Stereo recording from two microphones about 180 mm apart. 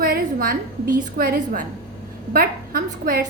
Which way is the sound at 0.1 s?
55° right (ahead or behind).